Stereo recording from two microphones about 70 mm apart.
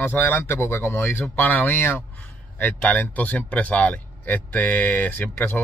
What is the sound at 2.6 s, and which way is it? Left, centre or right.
Speech, left.